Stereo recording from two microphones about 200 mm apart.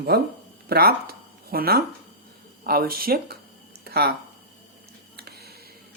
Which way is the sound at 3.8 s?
50° right (ahead or behind).